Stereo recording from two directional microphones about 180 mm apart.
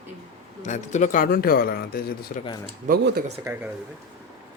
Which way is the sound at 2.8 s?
60° right (ahead or behind).